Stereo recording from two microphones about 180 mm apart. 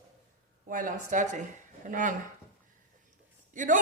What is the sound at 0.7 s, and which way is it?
A woman's voice, 50° right (ahead or behind).